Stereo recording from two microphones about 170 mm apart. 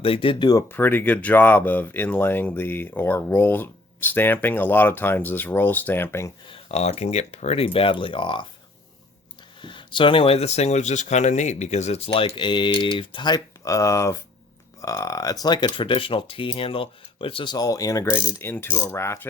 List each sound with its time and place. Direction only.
0.0 s speech: 30° left (ahead or behind)
0.7 s speech: 10° left (ahead or behind)
6.5 s speech: 40° left (ahead or behind)
9.6 s speech: 30° left (ahead or behind)